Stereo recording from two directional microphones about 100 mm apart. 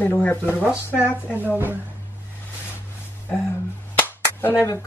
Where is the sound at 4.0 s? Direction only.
20° left (ahead or behind).